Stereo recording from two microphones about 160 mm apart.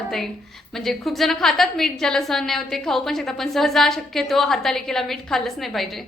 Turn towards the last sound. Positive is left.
turn(degrees=0)  # may be behind; listen again after turning